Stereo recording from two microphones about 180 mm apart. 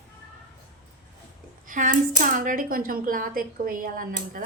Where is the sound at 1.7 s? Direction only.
45° right (ahead or behind).